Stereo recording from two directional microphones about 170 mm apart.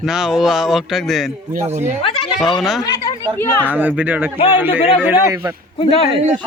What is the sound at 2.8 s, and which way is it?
Speech, 20° left (ahead or behind).